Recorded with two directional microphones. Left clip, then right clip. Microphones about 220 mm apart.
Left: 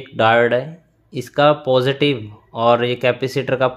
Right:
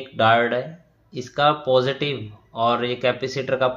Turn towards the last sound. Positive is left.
turn(degrees=45)  # may be behind; listen again after turning